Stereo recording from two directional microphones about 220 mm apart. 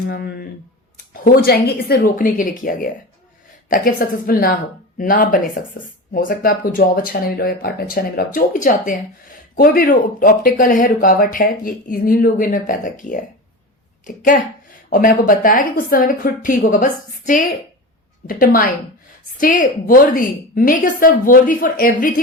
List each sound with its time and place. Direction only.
0.1 s speech: 45° left (ahead or behind)